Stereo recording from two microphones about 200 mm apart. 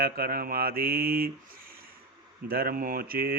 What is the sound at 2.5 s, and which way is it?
Mantra, 50° right (ahead or behind).